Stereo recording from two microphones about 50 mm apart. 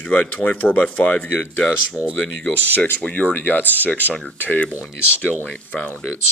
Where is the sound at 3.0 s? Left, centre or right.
Left.